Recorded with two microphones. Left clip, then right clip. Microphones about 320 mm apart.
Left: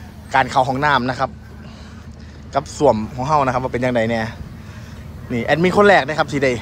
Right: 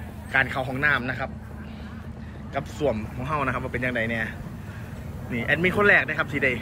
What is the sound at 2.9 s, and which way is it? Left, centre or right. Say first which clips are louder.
Speech: left 12 dB; centre.